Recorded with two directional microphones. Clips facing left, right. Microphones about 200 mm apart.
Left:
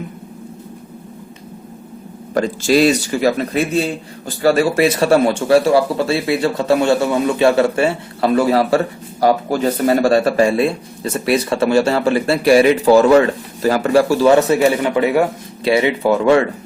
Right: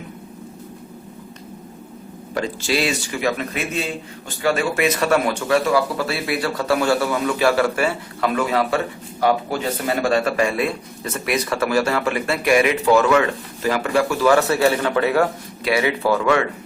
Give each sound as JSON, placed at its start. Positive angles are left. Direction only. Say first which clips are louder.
{"t": 2.3, "sound": "speech", "louder": "left 8 dB", "side_deg": 45}